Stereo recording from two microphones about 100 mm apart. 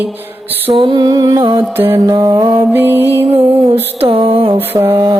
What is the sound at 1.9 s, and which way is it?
Music, 35° right (ahead or behind).